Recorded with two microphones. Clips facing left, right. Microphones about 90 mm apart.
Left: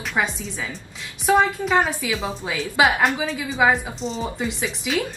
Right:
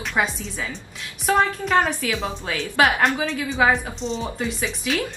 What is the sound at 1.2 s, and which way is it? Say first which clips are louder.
A woman's voice: left 2 dB; 5° left (ahead or behind).